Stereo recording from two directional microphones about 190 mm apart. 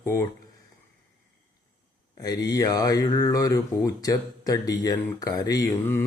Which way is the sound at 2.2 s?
20° left (ahead or behind).